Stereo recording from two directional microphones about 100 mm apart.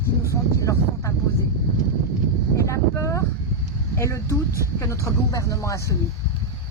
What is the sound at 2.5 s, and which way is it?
Speech, 30° left (ahead or behind).